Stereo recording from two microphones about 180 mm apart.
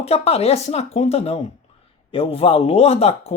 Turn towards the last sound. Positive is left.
turn(degrees=35)  # may be behind; listen again after turning